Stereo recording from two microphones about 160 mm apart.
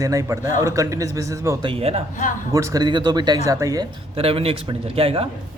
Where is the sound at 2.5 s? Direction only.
20° right (ahead or behind).